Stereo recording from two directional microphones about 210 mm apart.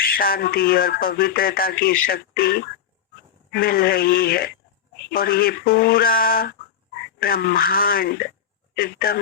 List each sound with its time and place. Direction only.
0.0 s speech: 45° left (ahead or behind)